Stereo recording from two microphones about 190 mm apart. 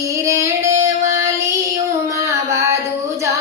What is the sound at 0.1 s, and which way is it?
Female singing, 15° right (ahead or behind).